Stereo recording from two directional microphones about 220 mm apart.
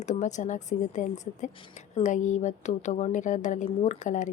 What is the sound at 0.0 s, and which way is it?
A woman's voice, 35° left (ahead or behind).